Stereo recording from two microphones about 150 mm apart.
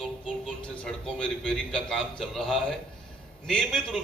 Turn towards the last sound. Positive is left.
turn(degrees=0)  # may be behind; listen again after turning